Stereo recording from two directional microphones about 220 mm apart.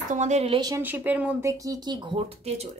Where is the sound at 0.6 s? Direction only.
15° right (ahead or behind).